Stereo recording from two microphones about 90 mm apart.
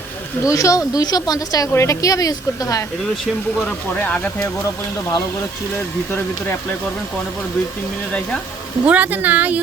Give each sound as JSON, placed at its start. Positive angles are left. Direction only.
{"t": 0.4, "sound": "a woman's voice", "side_deg": 35}
{"t": 3.7, "sound": "speech", "side_deg": 15}
{"t": 6.1, "sound": "speech", "side_deg": 25}
{"t": 8.9, "sound": "a woman's voice", "side_deg": -20}